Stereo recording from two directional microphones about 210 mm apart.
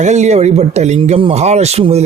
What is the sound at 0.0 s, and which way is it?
A man's voice, 35° right (ahead or behind).